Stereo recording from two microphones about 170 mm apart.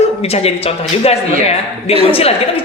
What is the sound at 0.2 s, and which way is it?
Speech, 35° left (ahead or behind).